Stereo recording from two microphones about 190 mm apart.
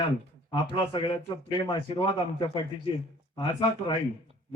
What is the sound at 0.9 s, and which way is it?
A man's voice, 25° left (ahead or behind).